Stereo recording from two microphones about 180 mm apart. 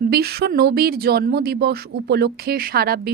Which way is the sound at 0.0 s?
60° right (ahead or behind).